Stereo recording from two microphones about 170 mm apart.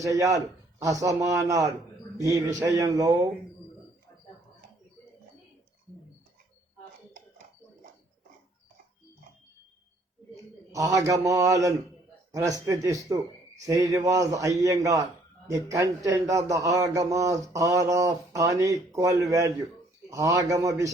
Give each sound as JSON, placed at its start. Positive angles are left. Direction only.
{"t": 0.0, "sound": "speech", "side_deg": -20}
{"t": 10.7, "sound": "speech", "side_deg": -20}